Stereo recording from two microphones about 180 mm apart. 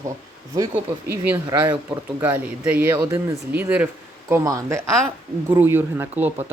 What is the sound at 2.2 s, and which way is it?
Speech, 10° right (ahead or behind).